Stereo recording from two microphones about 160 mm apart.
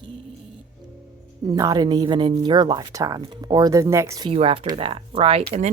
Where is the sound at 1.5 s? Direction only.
25° right (ahead or behind).